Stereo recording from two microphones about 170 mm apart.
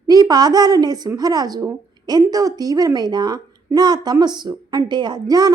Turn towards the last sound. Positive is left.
turn(degrees=-20)  # may be behind; listen again after turning